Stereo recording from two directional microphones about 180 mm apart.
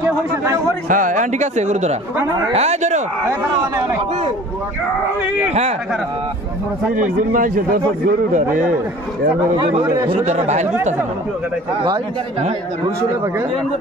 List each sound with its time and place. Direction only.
0.8 s a man's voice: 45° right (ahead or behind)
5.5 s a man's voice: 35° right (ahead or behind)
7.3 s speech: 50° right (ahead or behind)
9.8 s speech: 20° right (ahead or behind)
10.2 s a man's voice: 40° right (ahead or behind)
11.8 s a man's voice: 30° right (ahead or behind)